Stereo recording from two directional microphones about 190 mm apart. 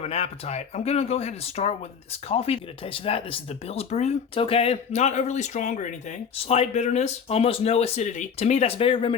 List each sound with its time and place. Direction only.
0.0 s speech: 35° left (ahead or behind)